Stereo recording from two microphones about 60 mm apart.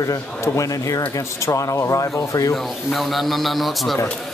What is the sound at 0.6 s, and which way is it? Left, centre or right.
Speech, left.